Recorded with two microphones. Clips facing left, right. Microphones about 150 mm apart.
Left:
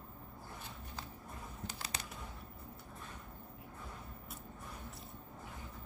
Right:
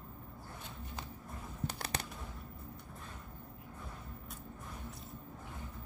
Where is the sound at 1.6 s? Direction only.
60° right (ahead or behind).